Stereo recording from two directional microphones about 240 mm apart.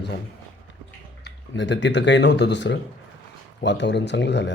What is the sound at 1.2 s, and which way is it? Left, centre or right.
Speech, left.